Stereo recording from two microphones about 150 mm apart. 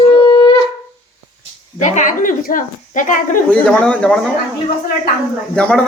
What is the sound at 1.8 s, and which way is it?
Speech, 55° left (ahead or behind).